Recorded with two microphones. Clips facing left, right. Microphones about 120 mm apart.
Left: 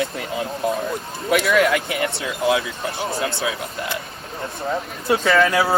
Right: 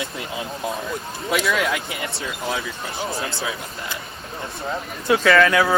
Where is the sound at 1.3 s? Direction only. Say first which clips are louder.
Left 5 dB; 60° left (ahead or behind).